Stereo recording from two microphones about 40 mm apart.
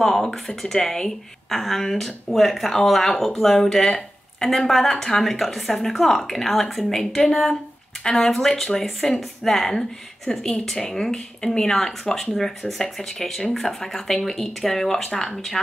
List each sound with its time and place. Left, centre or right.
0.0 s speech: centre
8.0 s speech: centre
8.3 s speech: centre